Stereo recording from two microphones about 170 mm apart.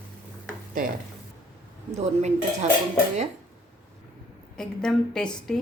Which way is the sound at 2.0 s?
40° right (ahead or behind).